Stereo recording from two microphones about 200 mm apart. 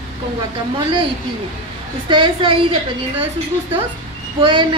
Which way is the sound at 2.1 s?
25° right (ahead or behind).